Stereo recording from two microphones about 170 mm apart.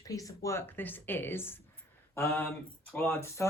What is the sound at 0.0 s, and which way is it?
Speech, 20° left (ahead or behind).